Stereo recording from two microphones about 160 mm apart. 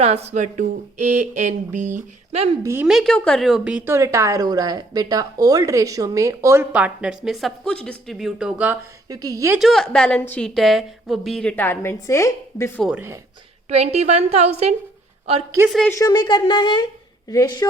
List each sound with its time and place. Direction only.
0.0 s speech: 40° right (ahead or behind)
2.3 s a woman's voice: 40° right (ahead or behind)
2.8 s a woman's voice: centre (ahead or behind)
9.0 s a woman's voice: 25° right (ahead or behind)
9.6 s a woman's voice: centre (ahead or behind); by 12.8 s 15° left (ahead or behind)
12.9 s speech: 10° right (ahead or behind)
13.7 s a woman's voice: 40° right (ahead or behind)
15.9 s speech: 20° left (ahead or behind)